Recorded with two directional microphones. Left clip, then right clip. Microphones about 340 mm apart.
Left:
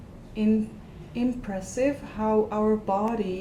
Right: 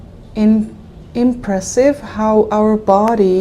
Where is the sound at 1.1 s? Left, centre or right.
Right.